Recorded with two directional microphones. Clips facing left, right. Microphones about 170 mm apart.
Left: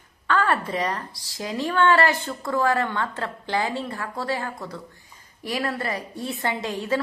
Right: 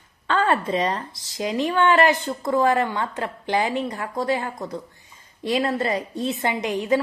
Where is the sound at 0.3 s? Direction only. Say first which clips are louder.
Right 2 dB; 20° right (ahead or behind).